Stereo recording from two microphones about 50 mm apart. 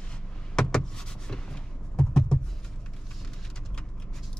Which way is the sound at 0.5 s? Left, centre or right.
Centre.